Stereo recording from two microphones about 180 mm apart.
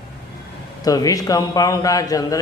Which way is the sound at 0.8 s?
20° left (ahead or behind).